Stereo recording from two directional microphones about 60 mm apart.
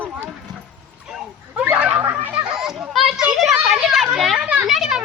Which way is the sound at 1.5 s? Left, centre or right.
Centre.